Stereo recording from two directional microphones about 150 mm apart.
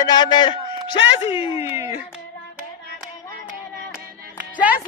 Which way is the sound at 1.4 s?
20° right (ahead or behind).